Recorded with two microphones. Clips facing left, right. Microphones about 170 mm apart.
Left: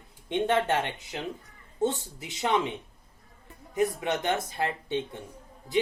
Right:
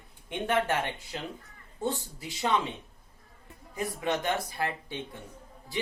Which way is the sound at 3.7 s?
20° left (ahead or behind).